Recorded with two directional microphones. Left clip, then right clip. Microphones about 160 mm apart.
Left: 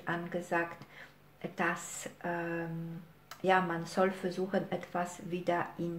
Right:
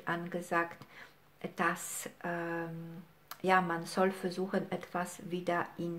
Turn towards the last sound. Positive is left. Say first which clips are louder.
# left 1 dB
turn(degrees=-35)  # may be behind; listen again after turning